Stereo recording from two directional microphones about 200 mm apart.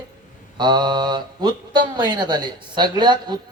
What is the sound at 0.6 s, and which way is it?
Mantra, 20° right (ahead or behind).